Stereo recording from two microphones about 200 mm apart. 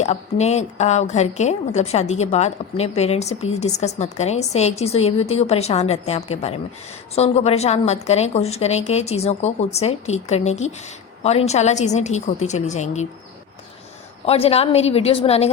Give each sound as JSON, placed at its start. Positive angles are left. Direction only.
{"t": 0.0, "sound": "a woman's voice", "side_deg": 35}
{"t": 14.3, "sound": "a woman's voice", "side_deg": 30}